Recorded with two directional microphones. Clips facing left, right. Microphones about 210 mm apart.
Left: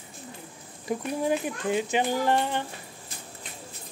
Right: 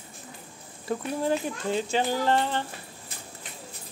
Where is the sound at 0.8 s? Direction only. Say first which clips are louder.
Even; 15° left (ahead or behind).